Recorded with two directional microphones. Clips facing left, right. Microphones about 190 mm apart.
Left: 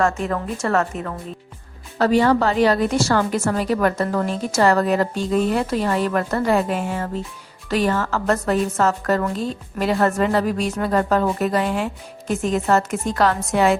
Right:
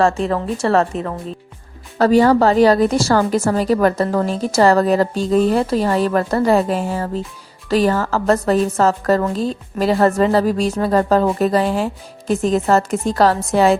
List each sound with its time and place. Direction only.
0.2 s a woman's voice: 30° right (ahead or behind)